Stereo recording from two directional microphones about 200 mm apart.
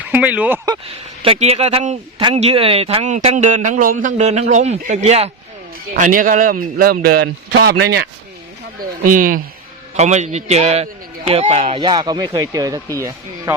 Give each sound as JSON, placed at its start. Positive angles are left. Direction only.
{"t": 0.0, "sound": "speech", "side_deg": -10}
{"t": 1.2, "sound": "speech", "side_deg": -30}
{"t": 5.9, "sound": "speech", "side_deg": -45}
{"t": 11.8, "sound": "speech", "side_deg": -20}